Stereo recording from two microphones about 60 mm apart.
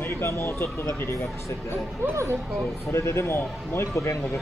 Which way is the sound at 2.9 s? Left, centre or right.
Left.